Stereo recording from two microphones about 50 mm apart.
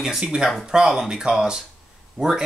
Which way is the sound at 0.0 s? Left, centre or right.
Centre.